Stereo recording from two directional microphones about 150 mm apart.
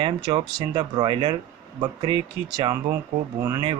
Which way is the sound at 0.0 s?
35° right (ahead or behind).